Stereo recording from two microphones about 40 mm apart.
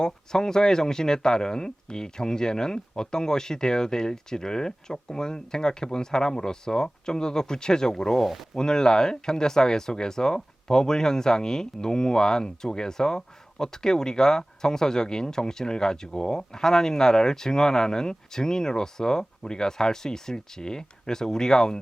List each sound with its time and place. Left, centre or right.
0.0 s speech: centre